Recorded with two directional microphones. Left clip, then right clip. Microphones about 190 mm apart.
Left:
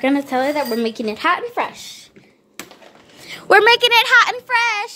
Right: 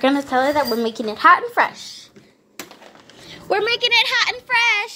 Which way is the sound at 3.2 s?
55° left (ahead or behind).